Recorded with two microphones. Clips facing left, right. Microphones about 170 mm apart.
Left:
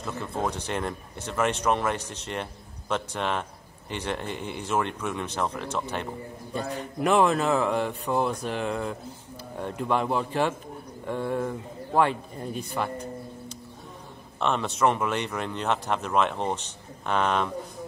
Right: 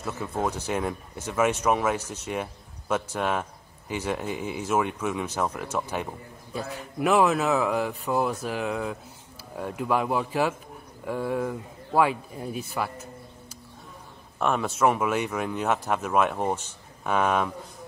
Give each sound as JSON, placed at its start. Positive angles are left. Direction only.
{"t": 0.0, "sound": "a man's voice", "side_deg": -10}